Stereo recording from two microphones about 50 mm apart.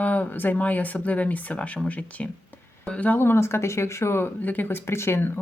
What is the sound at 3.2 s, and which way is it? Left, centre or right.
Speech, left.